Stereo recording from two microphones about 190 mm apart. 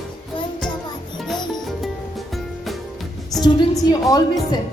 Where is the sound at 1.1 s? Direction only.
Centre (ahead or behind).